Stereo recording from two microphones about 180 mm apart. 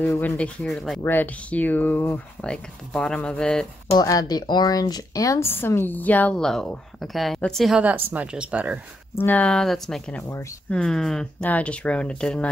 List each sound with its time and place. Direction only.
0.1 s speech: 10° left (ahead or behind)
4.0 s speech: 20° left (ahead or behind); by 8.7 s 10° right (ahead or behind)
9.2 s speech: 10° left (ahead or behind)